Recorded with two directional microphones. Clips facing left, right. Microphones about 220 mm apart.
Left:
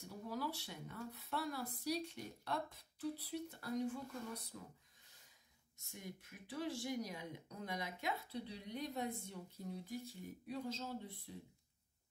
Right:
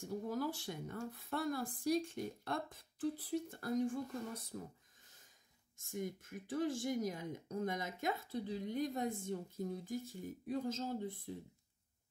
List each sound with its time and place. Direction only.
0.0 s speech: 45° right (ahead or behind)
5.8 s speech: 50° right (ahead or behind)